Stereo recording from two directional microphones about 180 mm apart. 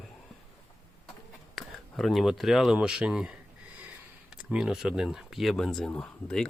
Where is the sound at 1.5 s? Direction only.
Centre (ahead or behind).